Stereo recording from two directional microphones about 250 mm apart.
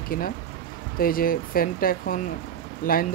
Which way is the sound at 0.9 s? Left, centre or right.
Left.